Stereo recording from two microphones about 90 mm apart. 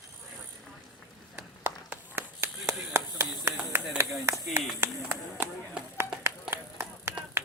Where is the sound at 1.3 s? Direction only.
20° right (ahead or behind).